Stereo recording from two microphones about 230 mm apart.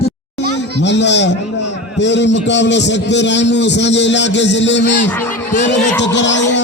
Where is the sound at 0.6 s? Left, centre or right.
Left.